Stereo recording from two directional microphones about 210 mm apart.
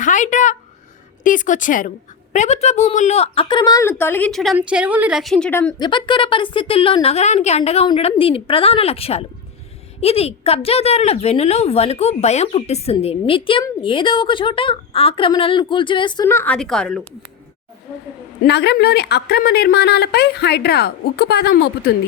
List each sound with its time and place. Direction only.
0.0 s a woman's voice: 35° left (ahead or behind); by 5.7 s 10° left (ahead or behind)
5.8 s a woman's voice: 20° left (ahead or behind); by 17.1 s 5° left (ahead or behind)
18.4 s a woman's voice: 50° left (ahead or behind)